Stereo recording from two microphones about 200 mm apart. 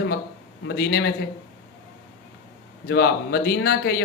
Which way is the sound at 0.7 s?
55° left (ahead or behind).